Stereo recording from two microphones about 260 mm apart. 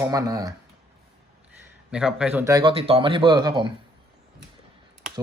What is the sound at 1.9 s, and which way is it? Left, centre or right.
A man's voice, centre.